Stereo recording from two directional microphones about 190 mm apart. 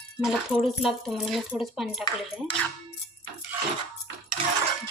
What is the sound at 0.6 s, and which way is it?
Speech, centre (ahead or behind).